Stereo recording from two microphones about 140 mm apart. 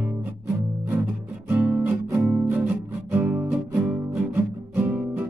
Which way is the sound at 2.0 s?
15° right (ahead or behind).